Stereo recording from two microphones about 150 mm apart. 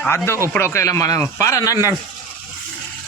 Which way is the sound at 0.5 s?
20° left (ahead or behind).